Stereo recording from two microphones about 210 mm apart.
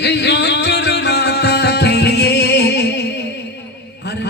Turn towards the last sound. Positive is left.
turn(degrees=55)  # may be behind; listen again after turning